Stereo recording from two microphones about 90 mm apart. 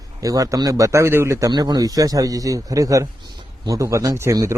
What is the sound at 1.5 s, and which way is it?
A man's voice, 55° right (ahead or behind).